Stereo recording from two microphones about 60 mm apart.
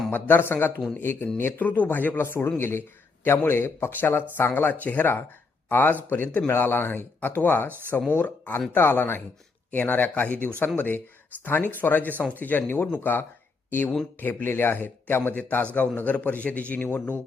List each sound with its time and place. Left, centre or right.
0.1 s a man's voice: left
15.4 s a man's voice: left